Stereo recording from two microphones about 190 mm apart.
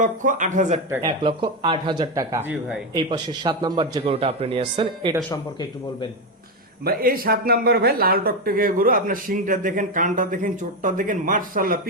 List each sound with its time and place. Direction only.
0.0 s speech: 45° right (ahead or behind)
1.0 s a man's voice: 25° right (ahead or behind); by 2.7 s 10° right (ahead or behind)
2.9 s a man's voice: 20° right (ahead or behind)
5.3 s a man's voice: 20° left (ahead or behind)
6.8 s speech: 50° right (ahead or behind)